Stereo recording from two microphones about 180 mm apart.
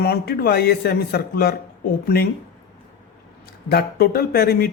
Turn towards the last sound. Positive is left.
turn(degrees=60)  # may be behind; listen again after turning